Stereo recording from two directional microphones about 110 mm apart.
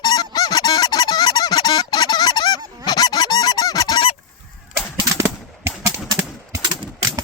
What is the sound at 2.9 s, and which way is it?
Goose, 40° left (ahead or behind).